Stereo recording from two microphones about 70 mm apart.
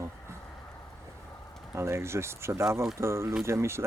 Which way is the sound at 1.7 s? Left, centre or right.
Right.